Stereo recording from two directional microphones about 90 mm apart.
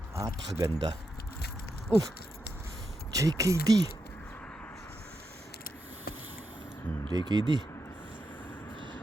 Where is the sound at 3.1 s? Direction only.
40° right (ahead or behind).